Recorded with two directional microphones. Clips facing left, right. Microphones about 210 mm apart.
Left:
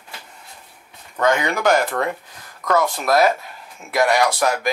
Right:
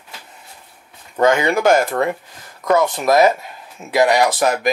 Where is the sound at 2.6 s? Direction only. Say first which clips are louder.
Right 4 dB; 20° right (ahead or behind).